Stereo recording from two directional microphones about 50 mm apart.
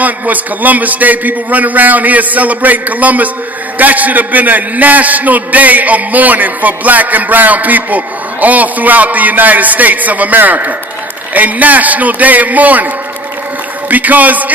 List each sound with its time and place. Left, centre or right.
0.0 s a man's voice: right
13.8 s a man's voice: right